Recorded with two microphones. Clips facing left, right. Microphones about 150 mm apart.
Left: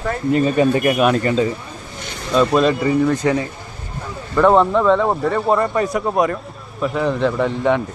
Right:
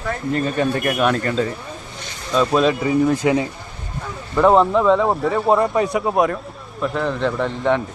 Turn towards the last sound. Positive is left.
turn(degrees=5)  # may be behind; listen again after turning